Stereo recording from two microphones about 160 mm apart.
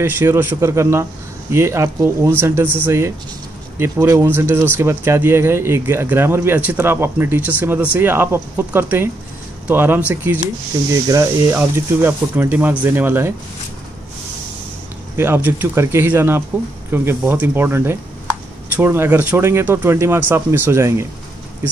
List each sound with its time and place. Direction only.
0.0 s speech: 15° right (ahead or behind)
15.1 s speech: 15° right (ahead or behind)